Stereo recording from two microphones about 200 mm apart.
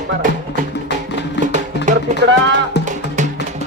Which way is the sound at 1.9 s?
40° right (ahead or behind).